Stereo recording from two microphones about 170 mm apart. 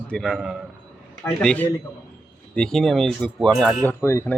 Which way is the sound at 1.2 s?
10° left (ahead or behind).